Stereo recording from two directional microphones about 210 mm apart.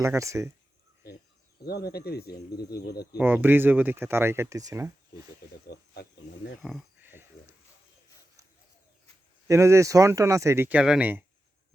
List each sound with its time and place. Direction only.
0.0 s speech: 15° right (ahead or behind)
1.6 s speech: 50° left (ahead or behind)
3.2 s speech: 10° right (ahead or behind)
5.6 s wild animals: 50° left (ahead or behind)
6.6 s a sound: centre (ahead or behind)
9.5 s speech: 15° right (ahead or behind)